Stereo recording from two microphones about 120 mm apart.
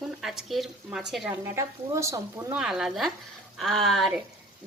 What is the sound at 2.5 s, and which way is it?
Speech, 5° right (ahead or behind).